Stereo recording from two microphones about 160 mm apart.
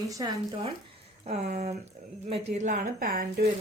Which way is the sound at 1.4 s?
65° right (ahead or behind).